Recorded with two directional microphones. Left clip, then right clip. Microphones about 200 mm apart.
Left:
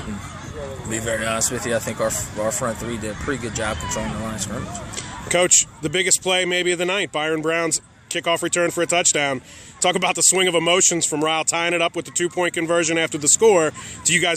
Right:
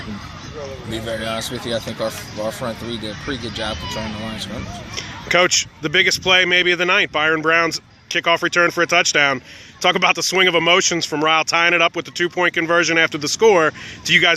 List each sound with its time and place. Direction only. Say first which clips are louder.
0.9 s speech: left 1 dB; 25° left (ahead or behind)
4.9 s a man's voice: right 4 dB; 5° left (ahead or behind)